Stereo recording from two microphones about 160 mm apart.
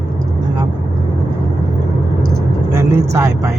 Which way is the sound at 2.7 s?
20° right (ahead or behind).